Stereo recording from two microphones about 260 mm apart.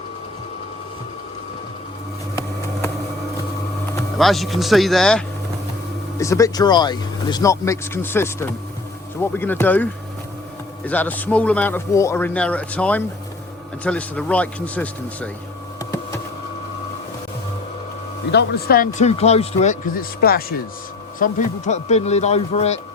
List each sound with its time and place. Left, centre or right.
4.2 s a man's voice: centre
18.3 s a man's voice: left